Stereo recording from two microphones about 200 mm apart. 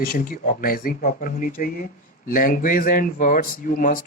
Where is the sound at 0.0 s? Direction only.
45° left (ahead or behind).